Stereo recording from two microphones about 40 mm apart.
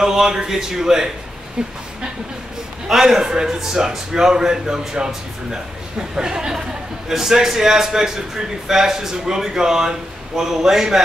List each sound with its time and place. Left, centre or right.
0.0 s a man's voice: centre
2.9 s a man's voice: centre